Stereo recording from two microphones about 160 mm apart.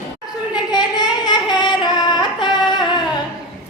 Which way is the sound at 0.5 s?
25° left (ahead or behind).